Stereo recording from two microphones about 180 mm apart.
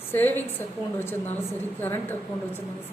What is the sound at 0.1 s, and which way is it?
Speech, 10° left (ahead or behind).